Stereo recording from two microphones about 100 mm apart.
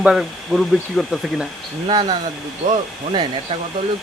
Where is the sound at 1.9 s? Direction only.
50° right (ahead or behind).